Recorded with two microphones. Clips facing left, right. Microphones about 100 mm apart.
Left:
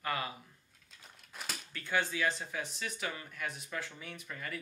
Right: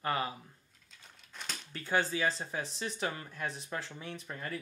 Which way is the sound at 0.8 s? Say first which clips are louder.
Left 1 dB; 5° left (ahead or behind).